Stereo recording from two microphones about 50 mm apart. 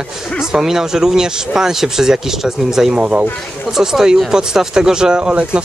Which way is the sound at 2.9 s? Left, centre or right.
Right.